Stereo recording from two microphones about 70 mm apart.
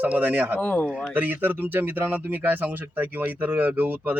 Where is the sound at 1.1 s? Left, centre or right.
Right.